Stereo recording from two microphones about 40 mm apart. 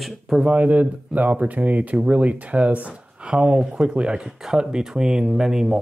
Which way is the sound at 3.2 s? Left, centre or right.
Right.